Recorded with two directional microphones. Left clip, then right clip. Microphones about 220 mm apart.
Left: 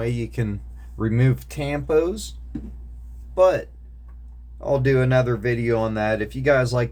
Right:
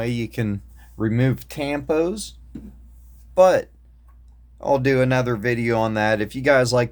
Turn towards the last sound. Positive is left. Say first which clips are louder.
# right 2 dB
turn(degrees=-50)  # may be behind; listen again after turning